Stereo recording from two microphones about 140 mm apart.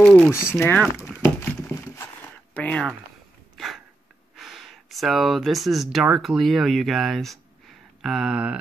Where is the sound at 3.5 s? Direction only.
Centre (ahead or behind).